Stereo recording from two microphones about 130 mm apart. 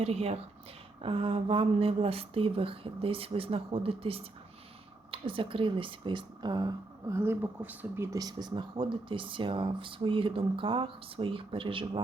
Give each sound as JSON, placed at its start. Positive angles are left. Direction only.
{"t": 0.0, "sound": "speech", "side_deg": -50}
{"t": 7.2, "sound": "speech", "side_deg": -15}